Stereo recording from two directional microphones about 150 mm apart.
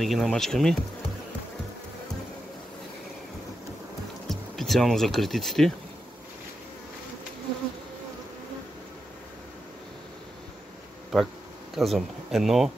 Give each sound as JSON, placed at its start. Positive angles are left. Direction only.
{"t": 0.0, "sound": "speech", "side_deg": 0}
{"t": 4.3, "sound": "speech", "side_deg": 0}
{"t": 11.1, "sound": "speech", "side_deg": 0}